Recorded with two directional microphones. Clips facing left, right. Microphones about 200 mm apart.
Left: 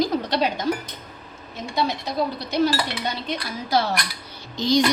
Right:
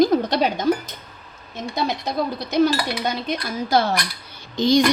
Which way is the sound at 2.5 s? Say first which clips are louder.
Right 5 dB; 45° right (ahead or behind).